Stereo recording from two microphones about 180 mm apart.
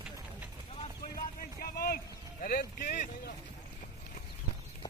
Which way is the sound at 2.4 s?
55° left (ahead or behind).